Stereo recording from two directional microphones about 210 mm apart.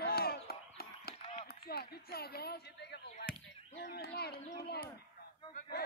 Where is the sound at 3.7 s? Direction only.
50° left (ahead or behind).